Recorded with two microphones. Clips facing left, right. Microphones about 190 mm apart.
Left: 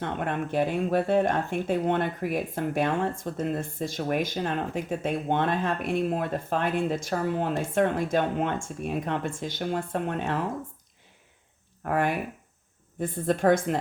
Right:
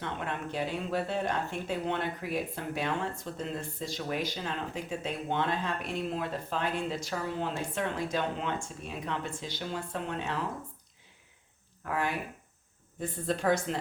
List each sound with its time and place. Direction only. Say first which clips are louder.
0.0 s speech: left 6 dB; 55° left (ahead or behind)
11.8 s speech: left 6 dB; 55° left (ahead or behind)